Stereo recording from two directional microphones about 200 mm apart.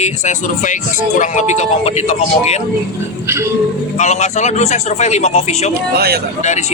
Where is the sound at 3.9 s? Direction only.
35° left (ahead or behind).